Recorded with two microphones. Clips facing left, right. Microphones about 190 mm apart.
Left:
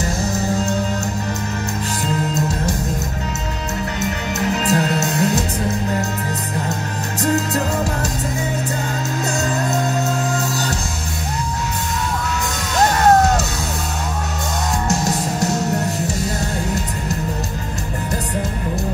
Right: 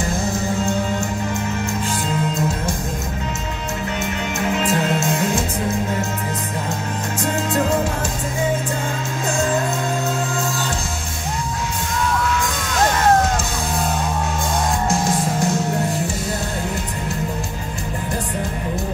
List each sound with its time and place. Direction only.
4.6 s music: 40° left (ahead or behind)
9.2 s music: 40° left (ahead or behind)